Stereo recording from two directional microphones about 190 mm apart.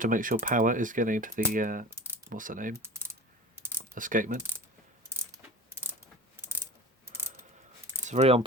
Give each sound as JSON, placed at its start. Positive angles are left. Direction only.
{"t": 0.0, "sound": "speech", "side_deg": -45}
{"t": 1.9, "sound": "typing", "side_deg": -15}
{"t": 2.3, "sound": "speech", "side_deg": -45}
{"t": 2.8, "sound": "typing", "side_deg": -15}
{"t": 3.8, "sound": "speech", "side_deg": -45}
{"t": 8.0, "sound": "speech", "side_deg": -35}